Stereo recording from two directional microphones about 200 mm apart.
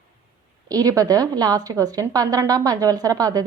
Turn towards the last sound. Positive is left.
turn(degrees=-20)  # may be behind; listen again after turning